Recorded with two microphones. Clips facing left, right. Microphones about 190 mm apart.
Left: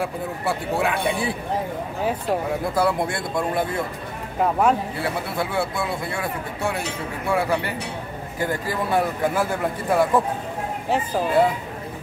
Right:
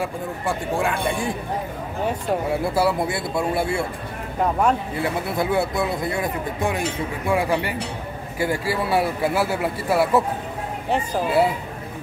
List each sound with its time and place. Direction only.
0.0 s speech: 5° left (ahead or behind)
2.6 s a man's voice: 10° right (ahead or behind)
4.4 s speech: 5° left (ahead or behind)
5.4 s a man's voice: 20° right (ahead or behind)